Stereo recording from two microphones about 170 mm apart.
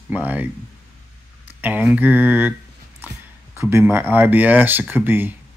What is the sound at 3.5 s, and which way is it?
Speech, 15° right (ahead or behind).